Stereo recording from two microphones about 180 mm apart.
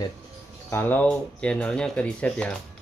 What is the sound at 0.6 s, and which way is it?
Speech, 10° left (ahead or behind).